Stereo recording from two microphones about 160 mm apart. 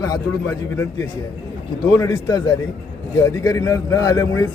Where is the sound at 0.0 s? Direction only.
20° left (ahead or behind).